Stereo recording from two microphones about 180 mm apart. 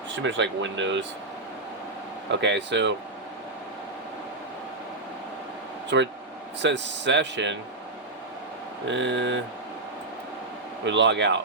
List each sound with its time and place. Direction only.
0.2 s speech: 90° right
2.3 s speech: 80° right
5.9 s speech: 85° right
8.9 s speech: 85° right
10.8 s speech: 80° right